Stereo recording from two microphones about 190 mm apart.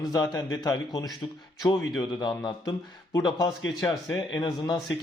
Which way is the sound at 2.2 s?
25° left (ahead or behind).